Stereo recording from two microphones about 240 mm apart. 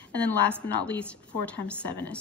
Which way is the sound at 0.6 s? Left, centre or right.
Centre.